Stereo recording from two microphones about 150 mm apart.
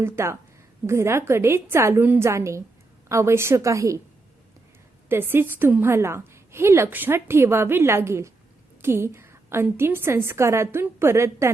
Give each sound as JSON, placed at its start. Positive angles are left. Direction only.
{"t": 0.0, "sound": "a woman's voice", "side_deg": -15}
{"t": 5.0, "sound": "a woman's voice", "side_deg": -15}